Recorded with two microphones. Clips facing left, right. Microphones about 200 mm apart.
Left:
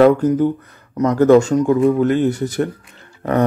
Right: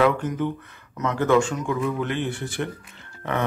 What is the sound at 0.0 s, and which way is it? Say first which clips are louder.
Speech: left 9 dB; 40° left (ahead or behind).